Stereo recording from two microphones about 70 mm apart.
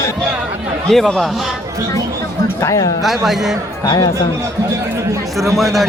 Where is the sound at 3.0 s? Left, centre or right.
Centre.